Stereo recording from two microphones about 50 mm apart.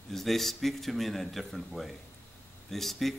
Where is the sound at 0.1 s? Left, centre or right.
Centre.